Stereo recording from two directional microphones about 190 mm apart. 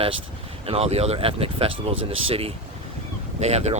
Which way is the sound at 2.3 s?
30° right (ahead or behind).